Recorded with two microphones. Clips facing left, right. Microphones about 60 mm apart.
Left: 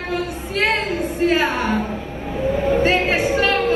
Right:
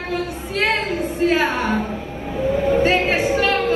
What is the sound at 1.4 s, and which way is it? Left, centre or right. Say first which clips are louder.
Speech: even; right.